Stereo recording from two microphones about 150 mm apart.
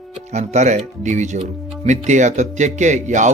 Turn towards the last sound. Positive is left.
turn(degrees=-55)  # may be behind; listen again after turning